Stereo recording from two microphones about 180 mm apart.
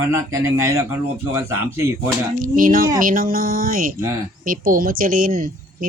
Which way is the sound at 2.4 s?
50° right (ahead or behind).